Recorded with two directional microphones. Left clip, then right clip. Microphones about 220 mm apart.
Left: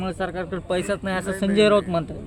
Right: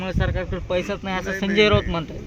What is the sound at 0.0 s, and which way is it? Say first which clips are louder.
Speech: right 1 dB; 50° left (ahead or behind).